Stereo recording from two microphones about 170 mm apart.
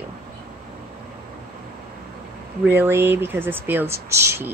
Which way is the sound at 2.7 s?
15° right (ahead or behind).